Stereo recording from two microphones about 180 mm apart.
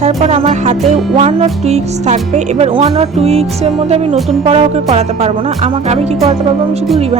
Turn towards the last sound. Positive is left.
turn(degrees=-35)  # may be behind; listen again after turning